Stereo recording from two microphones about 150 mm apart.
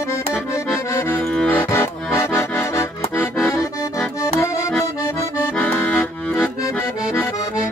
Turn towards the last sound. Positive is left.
turn(degrees=10)  # may be behind; listen again after turning